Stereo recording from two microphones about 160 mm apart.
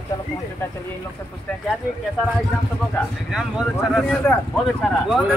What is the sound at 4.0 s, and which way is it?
Speech, 5° left (ahead or behind).